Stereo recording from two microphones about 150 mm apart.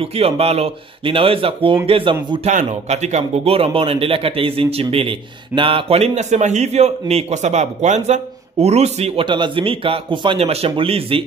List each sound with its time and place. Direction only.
0.0 s speech: 40° right (ahead or behind)
2.4 s speech: 50° right (ahead or behind)